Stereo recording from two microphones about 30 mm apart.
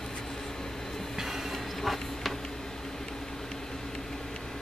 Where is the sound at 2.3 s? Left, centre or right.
Centre.